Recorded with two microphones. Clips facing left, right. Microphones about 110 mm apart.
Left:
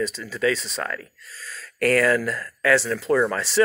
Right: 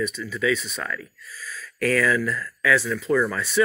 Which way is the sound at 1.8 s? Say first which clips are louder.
Left 3 dB; 70° left (ahead or behind).